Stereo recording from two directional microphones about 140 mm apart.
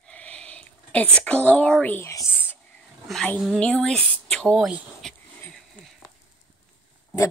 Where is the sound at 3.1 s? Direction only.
5° left (ahead or behind).